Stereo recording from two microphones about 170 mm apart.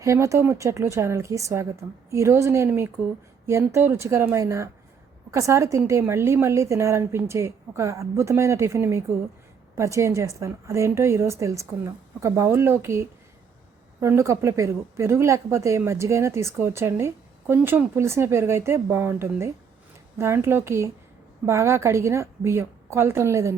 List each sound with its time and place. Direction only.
0.0 s a woman's voice: 20° right (ahead or behind)